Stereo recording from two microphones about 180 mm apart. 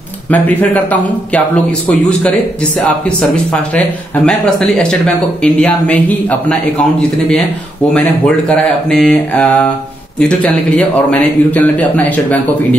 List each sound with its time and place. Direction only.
0.3 s a man's voice: 10° left (ahead or behind)
8.5 s a man's voice: 5° left (ahead or behind)